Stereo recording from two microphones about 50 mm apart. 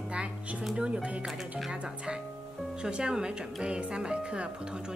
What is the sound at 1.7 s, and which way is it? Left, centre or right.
Speech, right.